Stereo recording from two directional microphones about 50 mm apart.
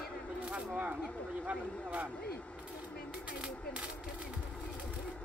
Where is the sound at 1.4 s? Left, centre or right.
Right.